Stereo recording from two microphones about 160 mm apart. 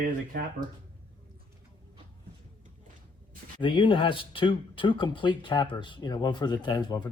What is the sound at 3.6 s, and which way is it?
Speech, 30° left (ahead or behind).